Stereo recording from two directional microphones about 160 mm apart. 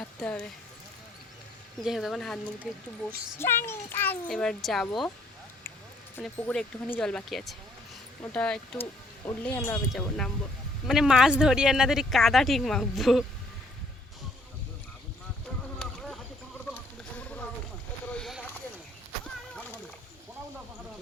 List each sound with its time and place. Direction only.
0.0 s speech: 5° left (ahead or behind)
1.8 s speech: centre (ahead or behind)
3.3 s speech: 15° left (ahead or behind)
6.1 s speech: 5° left (ahead or behind)
15.8 s a sound: 5° left (ahead or behind)